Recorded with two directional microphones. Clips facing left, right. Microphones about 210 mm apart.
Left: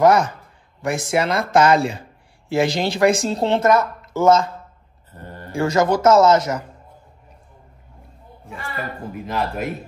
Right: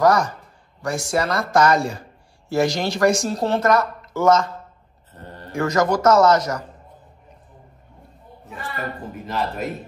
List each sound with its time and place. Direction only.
0.8 s speech: 25° left (ahead or behind)
5.5 s speech: 25° left (ahead or behind)
8.5 s a man's voice: centre (ahead or behind)